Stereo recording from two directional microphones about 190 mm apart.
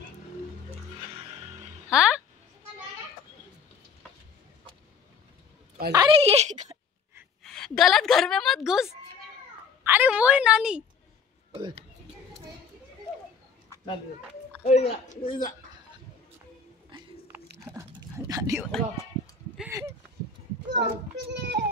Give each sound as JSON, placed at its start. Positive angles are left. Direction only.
{"t": 1.9, "sound": "speech", "side_deg": -5}
{"t": 5.9, "sound": "speech", "side_deg": -20}
{"t": 6.1, "sound": "speech", "side_deg": -35}
{"t": 7.4, "sound": "a woman's voice", "side_deg": 5}
{"t": 9.8, "sound": "a woman's voice", "side_deg": -10}
{"t": 11.5, "sound": "speech", "side_deg": -30}
{"t": 14.6, "sound": "a man's voice", "side_deg": 35}
{"t": 16.9, "sound": "biting", "side_deg": -25}
{"t": 17.3, "sound": "a sound", "side_deg": -15}
{"t": 19.7, "sound": "a sound", "side_deg": -15}
{"t": 20.7, "sound": "a child's voice", "side_deg": -65}